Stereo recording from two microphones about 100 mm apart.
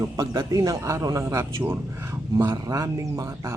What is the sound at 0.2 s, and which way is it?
A man's voice, 35° right (ahead or behind).